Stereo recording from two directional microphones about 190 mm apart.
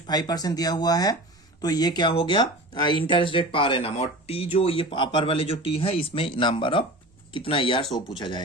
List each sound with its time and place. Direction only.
0.1 s speech: 20° left (ahead or behind)